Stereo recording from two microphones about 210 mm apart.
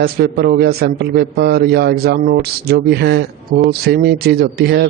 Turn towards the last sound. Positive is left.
turn(degrees=-50)  # may be behind; listen again after turning